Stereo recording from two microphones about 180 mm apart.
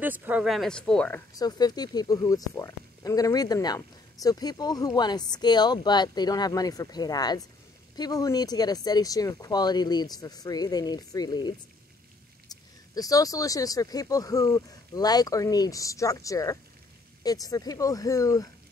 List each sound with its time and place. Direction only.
0.0 s speech: 10° right (ahead or behind); by 1.2 s 5° left (ahead or behind)
1.3 s speech: 20° left (ahead or behind)